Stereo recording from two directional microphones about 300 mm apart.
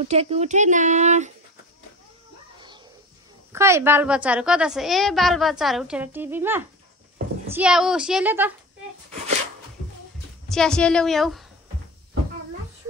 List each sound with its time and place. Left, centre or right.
0.1 s speech: right
3.5 s a woman's voice: centre
10.5 s a woman's voice: centre